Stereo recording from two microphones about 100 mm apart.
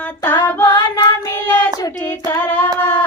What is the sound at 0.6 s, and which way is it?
Child singing, 50° left (ahead or behind).